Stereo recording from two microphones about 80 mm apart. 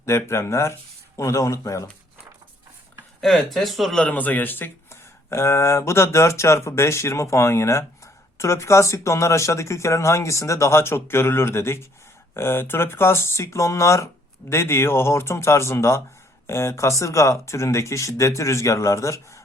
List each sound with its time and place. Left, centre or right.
0.0 s speech: left
3.2 s speech: centre
4.0 s speech: centre; by 19.2 s left